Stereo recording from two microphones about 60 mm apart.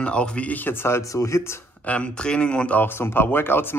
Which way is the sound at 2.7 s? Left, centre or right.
Left.